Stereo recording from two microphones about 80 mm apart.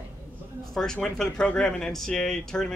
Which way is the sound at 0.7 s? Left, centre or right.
Centre.